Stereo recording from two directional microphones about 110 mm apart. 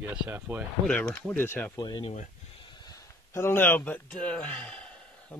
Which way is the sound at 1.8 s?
45° left (ahead or behind).